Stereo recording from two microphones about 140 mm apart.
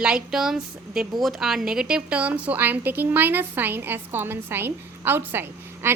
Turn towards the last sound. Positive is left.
turn(degrees=-15)  # may be behind; listen again after turning